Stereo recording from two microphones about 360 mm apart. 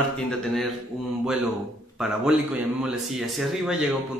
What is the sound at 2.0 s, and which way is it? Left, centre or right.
Speech, centre.